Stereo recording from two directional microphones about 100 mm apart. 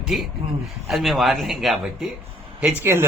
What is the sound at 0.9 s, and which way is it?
Speech, centre (ahead or behind).